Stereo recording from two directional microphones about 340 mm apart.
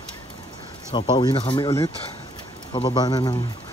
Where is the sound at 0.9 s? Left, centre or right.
Centre.